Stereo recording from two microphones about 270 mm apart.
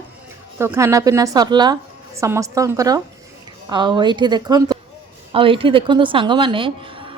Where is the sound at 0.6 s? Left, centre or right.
Centre.